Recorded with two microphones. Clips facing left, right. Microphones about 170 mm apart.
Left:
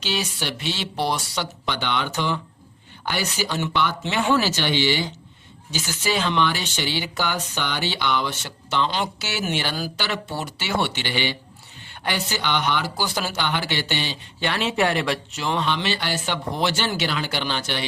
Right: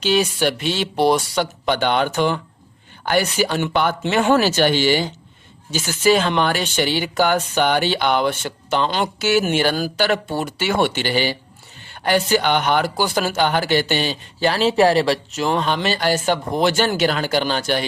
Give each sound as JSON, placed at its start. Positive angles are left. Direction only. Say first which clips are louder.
{"t": 0.0, "sound": "speech", "louder": "right 9 dB", "side_deg": -50}